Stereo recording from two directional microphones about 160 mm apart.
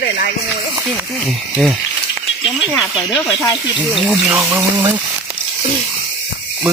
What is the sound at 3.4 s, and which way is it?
Speech, 20° left (ahead or behind).